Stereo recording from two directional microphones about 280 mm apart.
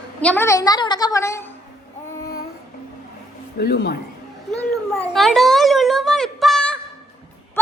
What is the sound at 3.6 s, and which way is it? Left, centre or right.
Speech, left.